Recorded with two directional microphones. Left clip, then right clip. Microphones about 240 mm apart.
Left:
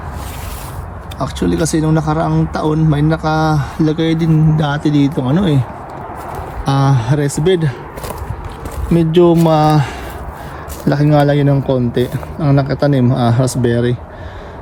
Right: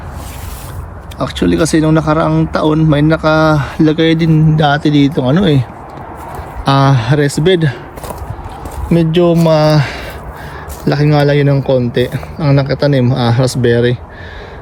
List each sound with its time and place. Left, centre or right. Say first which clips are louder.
1.2 s speech: right 4 dB; centre
6.7 s speech: right 5 dB; centre
8.9 s speech: even; centre